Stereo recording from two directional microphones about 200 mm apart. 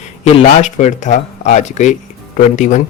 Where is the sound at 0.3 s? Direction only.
35° left (ahead or behind).